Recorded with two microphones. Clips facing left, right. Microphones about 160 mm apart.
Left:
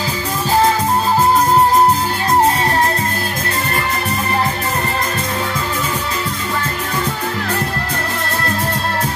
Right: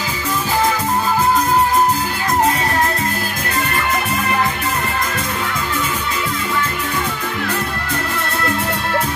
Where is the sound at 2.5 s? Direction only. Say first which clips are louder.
Left 2 dB; 30° left (ahead or behind).